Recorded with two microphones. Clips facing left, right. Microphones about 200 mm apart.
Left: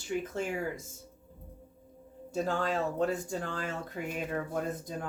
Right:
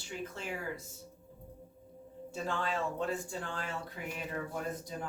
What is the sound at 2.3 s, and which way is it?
Speech, 40° left (ahead or behind).